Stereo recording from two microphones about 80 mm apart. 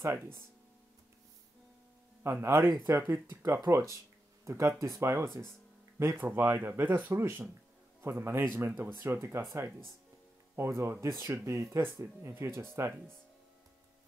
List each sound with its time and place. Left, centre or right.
0.0 s speech: right
2.2 s speech: right
10.5 s speech: right